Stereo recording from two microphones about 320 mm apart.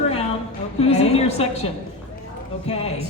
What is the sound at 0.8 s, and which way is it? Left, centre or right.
A woman's voice, centre.